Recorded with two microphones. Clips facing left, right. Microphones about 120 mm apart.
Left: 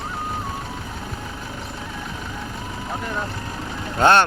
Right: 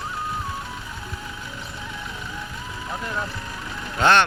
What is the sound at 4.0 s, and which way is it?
Speech, 40° left (ahead or behind).